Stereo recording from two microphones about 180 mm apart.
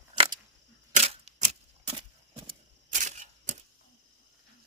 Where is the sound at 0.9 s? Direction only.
35° right (ahead or behind).